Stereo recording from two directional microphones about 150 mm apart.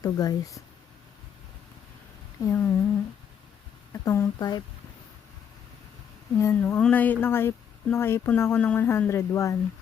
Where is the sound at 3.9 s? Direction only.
20° left (ahead or behind).